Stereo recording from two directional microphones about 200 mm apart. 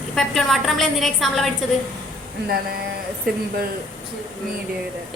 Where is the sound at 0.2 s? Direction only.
Centre (ahead or behind).